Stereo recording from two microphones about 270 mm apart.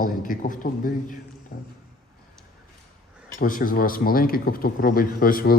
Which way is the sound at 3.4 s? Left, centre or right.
Left.